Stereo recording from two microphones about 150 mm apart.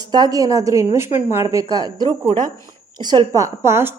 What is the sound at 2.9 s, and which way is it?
Speech, 30° right (ahead or behind).